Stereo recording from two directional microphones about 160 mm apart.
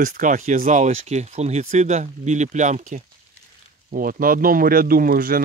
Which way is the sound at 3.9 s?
65° right (ahead or behind).